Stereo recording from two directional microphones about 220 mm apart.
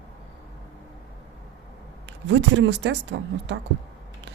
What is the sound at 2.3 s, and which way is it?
Speech, 55° right (ahead or behind).